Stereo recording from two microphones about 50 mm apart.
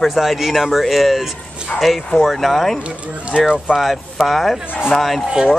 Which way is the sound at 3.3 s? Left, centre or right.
Centre.